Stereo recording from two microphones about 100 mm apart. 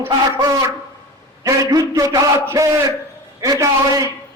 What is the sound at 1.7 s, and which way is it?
A man's voice, 35° right (ahead or behind).